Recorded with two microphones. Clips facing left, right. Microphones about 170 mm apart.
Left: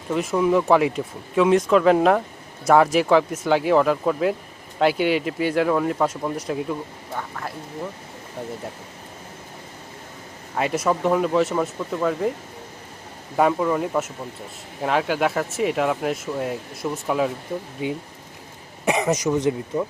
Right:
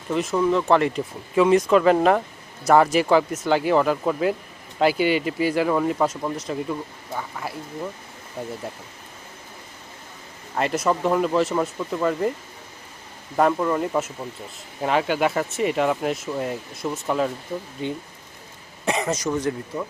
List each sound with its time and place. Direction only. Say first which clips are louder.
0.1 s speech: left 1 dB; 10° left (ahead or behind)
10.5 s speech: even; centre (ahead or behind)
13.3 s speech: left 1 dB; 5° left (ahead or behind)
18.9 s speech: left 3 dB; 15° left (ahead or behind)